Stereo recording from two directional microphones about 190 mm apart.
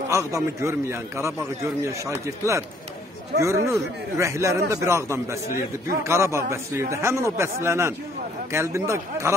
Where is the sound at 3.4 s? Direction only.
15° right (ahead or behind).